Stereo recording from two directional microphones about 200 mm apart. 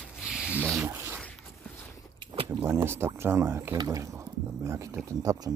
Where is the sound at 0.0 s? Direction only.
5° right (ahead or behind).